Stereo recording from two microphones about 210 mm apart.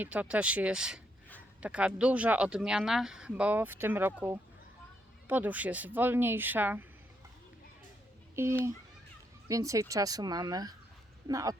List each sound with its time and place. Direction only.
0.0 s speech: 5° right (ahead or behind)
5.3 s a woman's voice: 10° right (ahead or behind)
8.4 s a woman's voice: 10° right (ahead or behind)